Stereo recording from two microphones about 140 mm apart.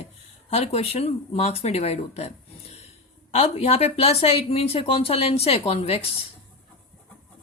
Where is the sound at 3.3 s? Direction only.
45° left (ahead or behind).